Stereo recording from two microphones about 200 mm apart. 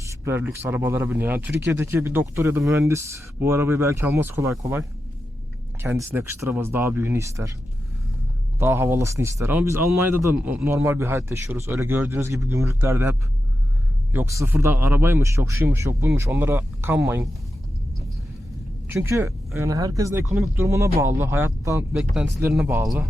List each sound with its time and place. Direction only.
0.1 s speech: 10° right (ahead or behind)
8.5 s speech: 10° right (ahead or behind)
18.9 s speech: 15° right (ahead or behind)
21.9 s speech: centre (ahead or behind)